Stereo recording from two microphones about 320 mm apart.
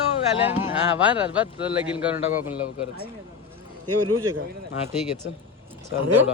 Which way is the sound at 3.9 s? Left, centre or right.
Right.